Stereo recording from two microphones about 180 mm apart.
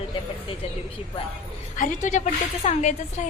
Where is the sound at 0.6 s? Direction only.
35° left (ahead or behind).